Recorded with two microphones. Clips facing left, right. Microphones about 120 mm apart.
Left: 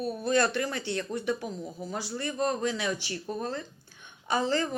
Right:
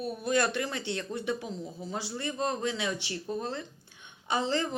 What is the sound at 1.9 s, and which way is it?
Speech, 25° right (ahead or behind).